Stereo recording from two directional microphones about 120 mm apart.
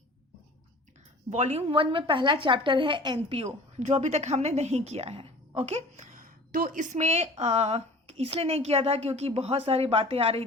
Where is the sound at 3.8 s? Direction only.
70° right (ahead or behind).